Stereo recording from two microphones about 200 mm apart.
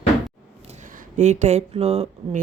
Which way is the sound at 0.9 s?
35° right (ahead or behind).